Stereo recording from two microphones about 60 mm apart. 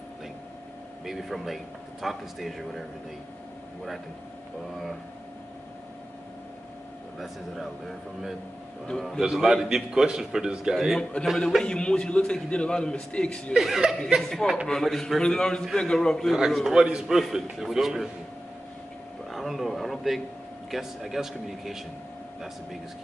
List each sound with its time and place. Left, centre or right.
1.0 s speech: centre
9.2 s a man's voice: centre
11.3 s speech: centre
13.7 s speech: centre
16.3 s a man's voice: centre
19.3 s a sound: centre
20.7 s speech: centre